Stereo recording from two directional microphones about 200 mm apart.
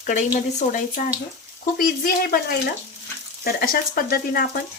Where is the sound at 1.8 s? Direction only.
50° left (ahead or behind).